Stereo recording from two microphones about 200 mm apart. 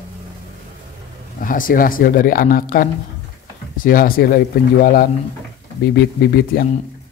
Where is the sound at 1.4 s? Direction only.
45° left (ahead or behind).